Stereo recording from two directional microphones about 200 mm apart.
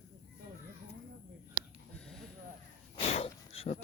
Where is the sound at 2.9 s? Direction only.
30° left (ahead or behind).